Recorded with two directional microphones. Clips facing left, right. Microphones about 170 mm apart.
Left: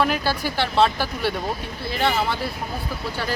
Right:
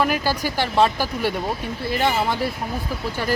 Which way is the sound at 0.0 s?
10° right (ahead or behind).